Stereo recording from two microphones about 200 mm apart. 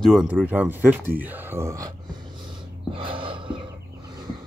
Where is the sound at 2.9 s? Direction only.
25° right (ahead or behind).